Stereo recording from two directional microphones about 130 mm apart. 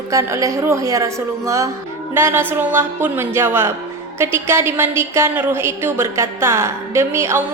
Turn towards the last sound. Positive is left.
turn(degrees=-20)  # may be behind; listen again after turning